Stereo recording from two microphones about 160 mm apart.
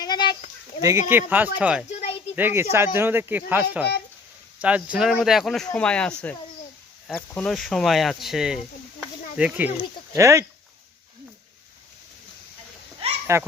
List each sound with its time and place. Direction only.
0.0 s a sound: 25° left (ahead or behind)
0.8 s speech: 20° right (ahead or behind)
1.9 s a sound: 45° left (ahead or behind)
2.3 s speech: 15° right (ahead or behind)
10.1 s speech: 20° right (ahead or behind)
13.3 s speech: 15° right (ahead or behind)